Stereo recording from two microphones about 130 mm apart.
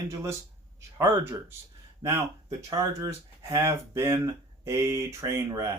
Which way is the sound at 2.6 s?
25° right (ahead or behind).